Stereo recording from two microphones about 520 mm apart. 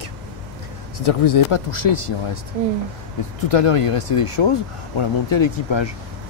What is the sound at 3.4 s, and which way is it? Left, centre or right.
Speech, left.